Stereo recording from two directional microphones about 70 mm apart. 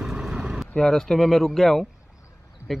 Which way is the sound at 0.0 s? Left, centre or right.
Centre.